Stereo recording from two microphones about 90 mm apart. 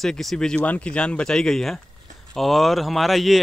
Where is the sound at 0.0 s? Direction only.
5° left (ahead or behind).